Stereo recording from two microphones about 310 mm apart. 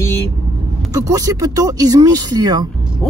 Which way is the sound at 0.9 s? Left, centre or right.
Centre.